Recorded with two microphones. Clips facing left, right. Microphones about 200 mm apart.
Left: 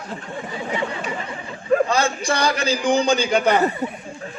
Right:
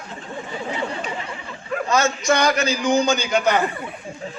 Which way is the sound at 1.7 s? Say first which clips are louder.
Left 3 dB; 35° left (ahead or behind).